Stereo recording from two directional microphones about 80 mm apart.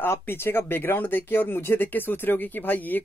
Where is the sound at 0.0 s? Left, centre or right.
Left.